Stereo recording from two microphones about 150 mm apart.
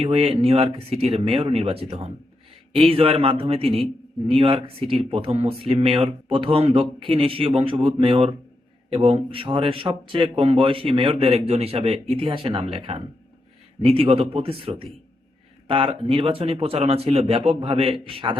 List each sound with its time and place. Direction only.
0.0 s speech: 40° right (ahead or behind)